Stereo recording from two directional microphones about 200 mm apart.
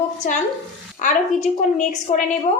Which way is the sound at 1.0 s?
40° left (ahead or behind).